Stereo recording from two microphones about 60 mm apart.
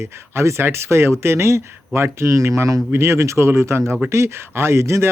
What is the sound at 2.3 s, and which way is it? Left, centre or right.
Speech, right.